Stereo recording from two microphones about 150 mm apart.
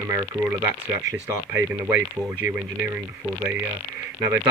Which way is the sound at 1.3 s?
15° right (ahead or behind).